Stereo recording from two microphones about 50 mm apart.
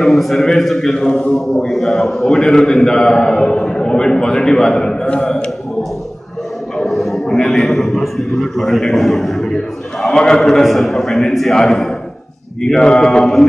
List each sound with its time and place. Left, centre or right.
0.0 s a man's voice: centre
5.0 s a man's voice: left
5.3 s a man's voice: centre
6.9 s a man's voice: centre